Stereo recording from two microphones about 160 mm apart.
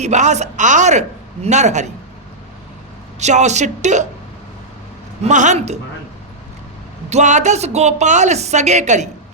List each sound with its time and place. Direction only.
0.0 s speech: 45° right (ahead or behind)
3.2 s speech: 45° right (ahead or behind)
5.2 s speech: 50° right (ahead or behind)
7.1 s speech: 45° right (ahead or behind)